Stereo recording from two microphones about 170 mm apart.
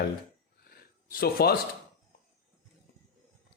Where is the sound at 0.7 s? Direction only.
60° left (ahead or behind).